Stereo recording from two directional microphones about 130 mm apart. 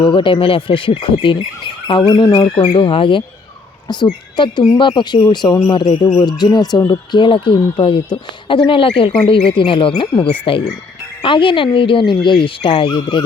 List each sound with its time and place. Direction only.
0.0 s speech: 40° left (ahead or behind)
2.6 s speech: 45° left (ahead or behind)